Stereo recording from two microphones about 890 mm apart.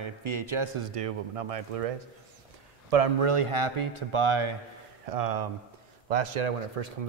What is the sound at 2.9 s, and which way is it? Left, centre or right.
A man's voice, right.